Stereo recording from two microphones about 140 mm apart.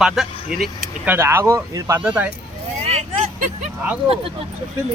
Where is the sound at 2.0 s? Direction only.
10° right (ahead or behind).